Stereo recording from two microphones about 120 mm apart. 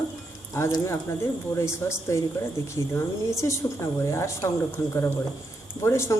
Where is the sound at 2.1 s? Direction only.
25° left (ahead or behind).